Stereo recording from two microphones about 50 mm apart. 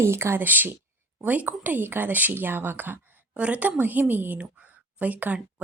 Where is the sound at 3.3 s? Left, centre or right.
Right.